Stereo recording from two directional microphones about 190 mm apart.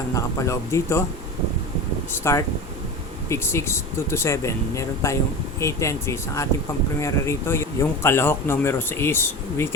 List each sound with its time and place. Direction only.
0.1 s speech: 15° left (ahead or behind)
2.3 s speech: 15° left (ahead or behind)